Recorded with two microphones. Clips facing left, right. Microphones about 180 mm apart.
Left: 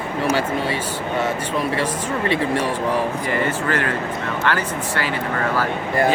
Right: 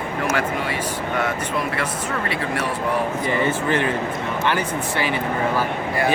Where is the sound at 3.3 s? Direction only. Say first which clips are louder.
Right 2 dB; 20° right (ahead or behind).